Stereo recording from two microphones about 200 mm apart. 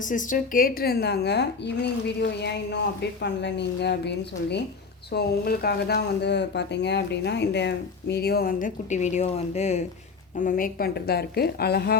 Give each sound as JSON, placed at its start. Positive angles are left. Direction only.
{"t": 0.0, "sound": "a woman's voice", "side_deg": 40}
{"t": 10.3, "sound": "speech", "side_deg": 45}